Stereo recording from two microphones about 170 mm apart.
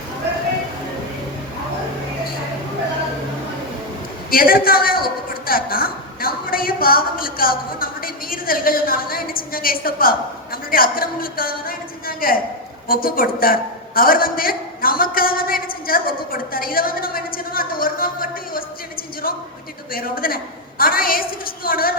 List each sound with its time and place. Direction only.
4.3 s a woman's voice: 60° left (ahead or behind)
19.9 s a woman's voice: 60° left (ahead or behind)